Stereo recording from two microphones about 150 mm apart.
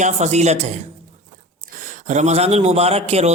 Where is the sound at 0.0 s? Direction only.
50° right (ahead or behind).